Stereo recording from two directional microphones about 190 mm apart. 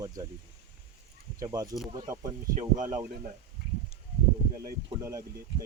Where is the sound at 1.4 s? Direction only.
20° right (ahead or behind).